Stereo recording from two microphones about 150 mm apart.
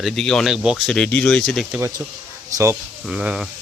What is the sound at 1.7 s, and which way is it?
Speech, 15° right (ahead or behind).